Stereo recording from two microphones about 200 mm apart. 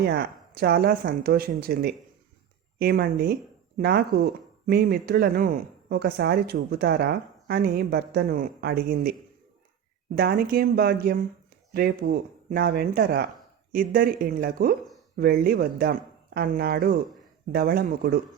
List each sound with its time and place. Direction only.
0.0 s speech: 50° right (ahead or behind)
10.2 s speech: 50° right (ahead or behind)